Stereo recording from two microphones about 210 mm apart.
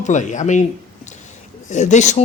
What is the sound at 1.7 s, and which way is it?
Speech, 35° left (ahead or behind).